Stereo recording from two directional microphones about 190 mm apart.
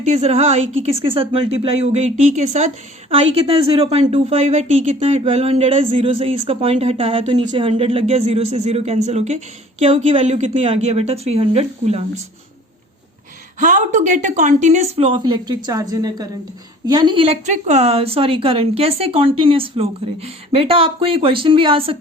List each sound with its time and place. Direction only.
0.0 s a woman's voice: 35° right (ahead or behind)
13.6 s a woman's voice: 40° right (ahead or behind)